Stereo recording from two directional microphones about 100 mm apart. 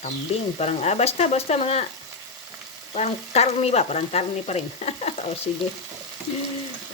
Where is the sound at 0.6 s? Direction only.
90° left.